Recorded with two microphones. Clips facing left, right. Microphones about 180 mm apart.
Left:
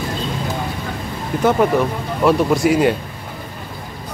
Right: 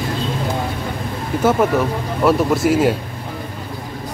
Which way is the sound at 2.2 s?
Centre (ahead or behind).